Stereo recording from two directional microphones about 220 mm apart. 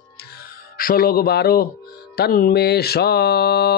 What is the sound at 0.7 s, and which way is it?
Speech, 40° left (ahead or behind).